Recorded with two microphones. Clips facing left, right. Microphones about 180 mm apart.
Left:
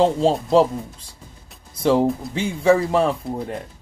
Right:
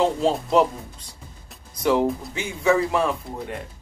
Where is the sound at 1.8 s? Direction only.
30° left (ahead or behind).